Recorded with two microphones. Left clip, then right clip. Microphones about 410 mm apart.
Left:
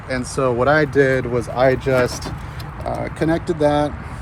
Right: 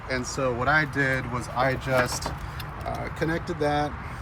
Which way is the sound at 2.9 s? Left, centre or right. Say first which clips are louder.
Left 9 dB; right.